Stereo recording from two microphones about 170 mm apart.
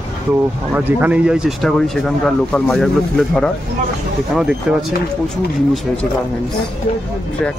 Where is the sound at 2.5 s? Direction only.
5° left (ahead or behind).